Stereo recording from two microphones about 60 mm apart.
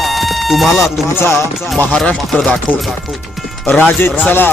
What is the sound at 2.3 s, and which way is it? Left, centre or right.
Speech, centre.